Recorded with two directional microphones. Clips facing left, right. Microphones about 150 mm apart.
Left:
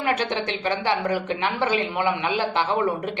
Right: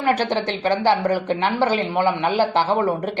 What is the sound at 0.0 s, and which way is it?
Speech, 35° right (ahead or behind).